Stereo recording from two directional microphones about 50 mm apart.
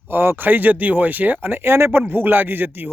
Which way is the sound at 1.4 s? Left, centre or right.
Right.